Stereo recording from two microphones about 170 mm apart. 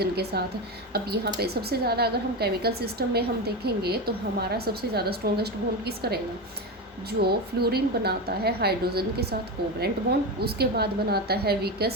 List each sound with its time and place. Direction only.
0.0 s a woman's voice: 70° right (ahead or behind)